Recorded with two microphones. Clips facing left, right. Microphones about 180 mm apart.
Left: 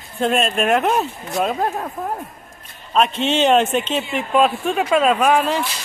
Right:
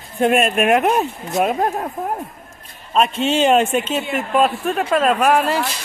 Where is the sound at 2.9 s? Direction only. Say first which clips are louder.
Right 1 dB; 10° right (ahead or behind).